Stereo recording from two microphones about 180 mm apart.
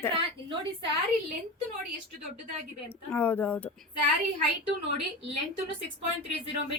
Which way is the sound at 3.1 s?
10° left (ahead or behind).